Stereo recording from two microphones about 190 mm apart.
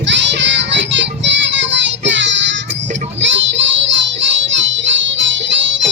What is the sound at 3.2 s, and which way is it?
Child singing, 75° right (ahead or behind).